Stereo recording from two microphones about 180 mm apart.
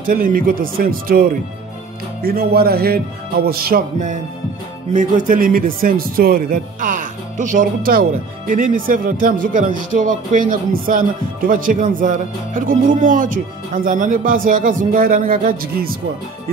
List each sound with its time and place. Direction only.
0.0 s a man's voice: 50° right (ahead or behind)